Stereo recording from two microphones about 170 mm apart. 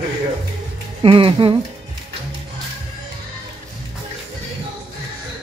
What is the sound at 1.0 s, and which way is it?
Speech, 30° right (ahead or behind).